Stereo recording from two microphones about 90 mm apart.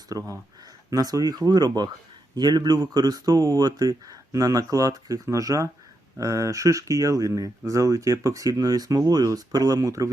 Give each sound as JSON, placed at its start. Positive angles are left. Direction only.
{"t": 0.1, "sound": "speech", "side_deg": -40}